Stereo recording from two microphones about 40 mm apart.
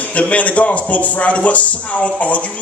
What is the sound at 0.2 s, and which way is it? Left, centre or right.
Speech, left.